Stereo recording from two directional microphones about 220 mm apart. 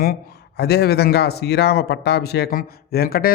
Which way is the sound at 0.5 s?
50° left (ahead or behind).